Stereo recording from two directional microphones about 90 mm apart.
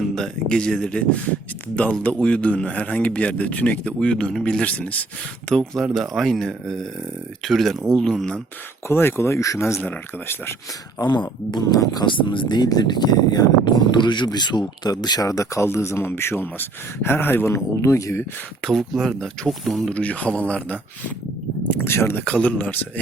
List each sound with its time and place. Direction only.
0.2 s speech: 10° left (ahead or behind)
8.9 s speech: 25° left (ahead or behind)
9.8 s speech: 15° left (ahead or behind)
11.5 s speech: 45° left (ahead or behind)
12.0 s speech: 65° left (ahead or behind); by 18.3 s 30° left (ahead or behind)
18.6 s speech: centre (ahead or behind)
19.9 s speech: 15° left (ahead or behind)
21.8 s speech: 25° left (ahead or behind)